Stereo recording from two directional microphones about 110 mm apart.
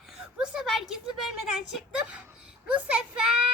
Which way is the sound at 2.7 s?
10° right (ahead or behind).